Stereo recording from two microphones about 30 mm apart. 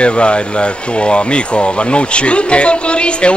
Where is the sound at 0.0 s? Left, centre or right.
Left.